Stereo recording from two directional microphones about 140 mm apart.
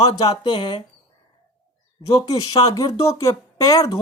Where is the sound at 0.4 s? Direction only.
35° left (ahead or behind).